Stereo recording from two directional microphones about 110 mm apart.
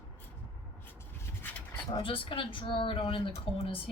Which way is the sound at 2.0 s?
55° left (ahead or behind).